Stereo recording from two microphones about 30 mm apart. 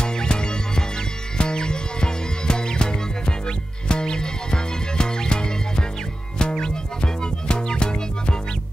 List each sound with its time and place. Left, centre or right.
0.0 s music: left